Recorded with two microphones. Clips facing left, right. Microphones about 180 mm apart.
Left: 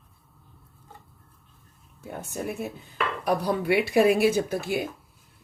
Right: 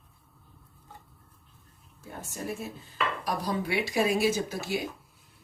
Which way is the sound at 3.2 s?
60° left (ahead or behind).